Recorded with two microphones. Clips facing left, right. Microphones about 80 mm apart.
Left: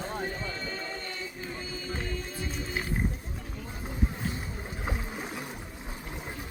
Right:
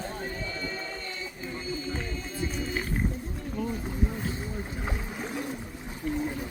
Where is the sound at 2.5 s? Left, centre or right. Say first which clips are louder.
Right 2 dB; centre.